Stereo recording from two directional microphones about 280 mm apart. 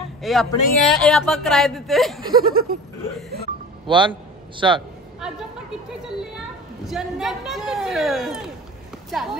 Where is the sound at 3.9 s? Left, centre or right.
Centre.